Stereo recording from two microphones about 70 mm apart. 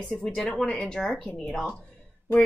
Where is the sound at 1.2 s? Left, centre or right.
Centre.